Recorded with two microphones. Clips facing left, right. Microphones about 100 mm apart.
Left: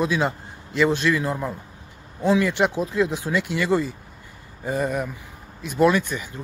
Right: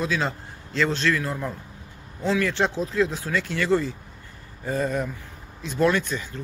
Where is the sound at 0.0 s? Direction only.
15° left (ahead or behind).